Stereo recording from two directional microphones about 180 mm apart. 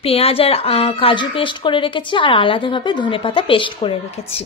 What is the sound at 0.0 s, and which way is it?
A woman's voice, 30° left (ahead or behind).